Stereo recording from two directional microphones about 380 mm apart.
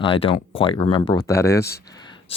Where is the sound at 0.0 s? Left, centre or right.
Centre.